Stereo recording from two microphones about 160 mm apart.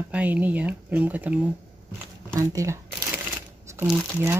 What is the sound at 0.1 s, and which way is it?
Speech, 10° right (ahead or behind).